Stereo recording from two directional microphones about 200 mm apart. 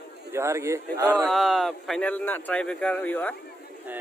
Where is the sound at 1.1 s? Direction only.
Centre (ahead or behind).